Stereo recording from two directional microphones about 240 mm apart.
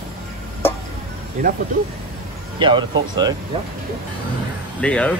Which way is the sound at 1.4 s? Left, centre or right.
Right.